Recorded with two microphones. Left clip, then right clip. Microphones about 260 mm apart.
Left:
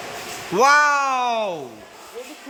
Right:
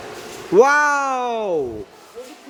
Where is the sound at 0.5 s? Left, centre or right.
Centre.